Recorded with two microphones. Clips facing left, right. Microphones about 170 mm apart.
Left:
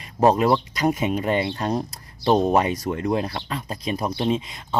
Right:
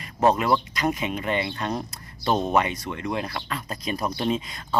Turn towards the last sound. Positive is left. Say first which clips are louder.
# left 2 dB
turn(degrees=25)  # may be behind; listen again after turning